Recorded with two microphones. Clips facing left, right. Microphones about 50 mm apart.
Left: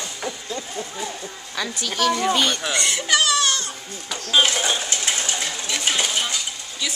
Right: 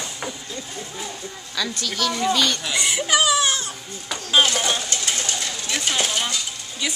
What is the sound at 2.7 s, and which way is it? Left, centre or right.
Speech, centre.